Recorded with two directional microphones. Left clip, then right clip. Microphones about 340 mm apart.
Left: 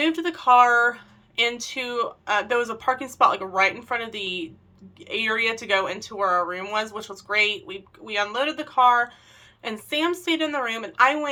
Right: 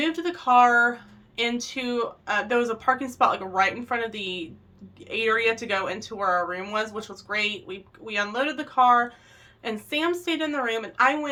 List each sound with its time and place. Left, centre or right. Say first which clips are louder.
0.0 s speech: left 3 dB; centre